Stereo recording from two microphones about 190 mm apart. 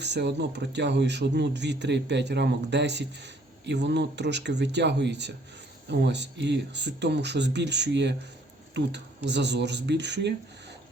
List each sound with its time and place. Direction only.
0.0 s speech: 65° right (ahead or behind)